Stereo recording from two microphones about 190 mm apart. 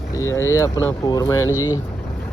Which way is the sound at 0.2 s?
15° left (ahead or behind).